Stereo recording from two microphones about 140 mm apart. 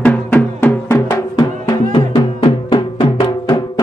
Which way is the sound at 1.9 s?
40° left (ahead or behind).